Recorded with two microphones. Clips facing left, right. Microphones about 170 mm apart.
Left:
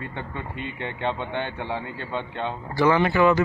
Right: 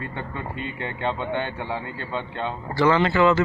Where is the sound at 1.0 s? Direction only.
10° left (ahead or behind).